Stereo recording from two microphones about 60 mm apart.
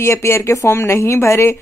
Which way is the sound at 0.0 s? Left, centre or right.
Left.